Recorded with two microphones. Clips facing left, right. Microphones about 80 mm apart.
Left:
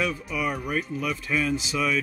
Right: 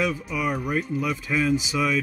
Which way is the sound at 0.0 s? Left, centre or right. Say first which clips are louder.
Right 2 dB; centre.